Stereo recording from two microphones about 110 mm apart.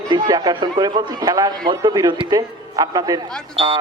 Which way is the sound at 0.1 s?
40° right (ahead or behind).